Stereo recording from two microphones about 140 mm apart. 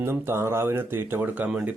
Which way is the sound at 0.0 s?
15° right (ahead or behind).